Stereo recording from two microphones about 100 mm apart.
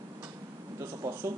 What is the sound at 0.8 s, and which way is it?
Speech, 35° right (ahead or behind).